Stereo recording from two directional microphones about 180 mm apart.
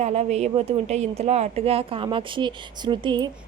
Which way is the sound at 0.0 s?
40° right (ahead or behind).